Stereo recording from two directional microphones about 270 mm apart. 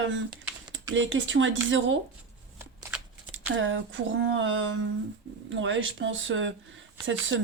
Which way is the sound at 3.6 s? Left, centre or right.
Right.